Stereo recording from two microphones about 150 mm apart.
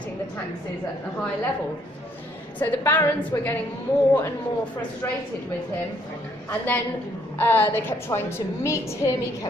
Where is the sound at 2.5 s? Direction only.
10° left (ahead or behind).